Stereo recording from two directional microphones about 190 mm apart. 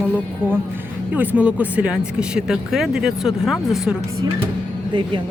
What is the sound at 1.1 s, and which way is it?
Speech, 10° right (ahead or behind).